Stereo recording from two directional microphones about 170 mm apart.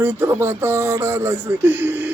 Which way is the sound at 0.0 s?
10° right (ahead or behind).